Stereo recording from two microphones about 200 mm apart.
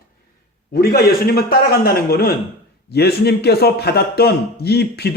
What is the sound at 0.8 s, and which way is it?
A man's voice, 50° left (ahead or behind).